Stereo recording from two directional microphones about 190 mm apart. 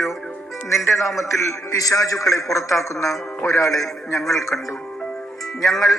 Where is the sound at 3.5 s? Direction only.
15° left (ahead or behind).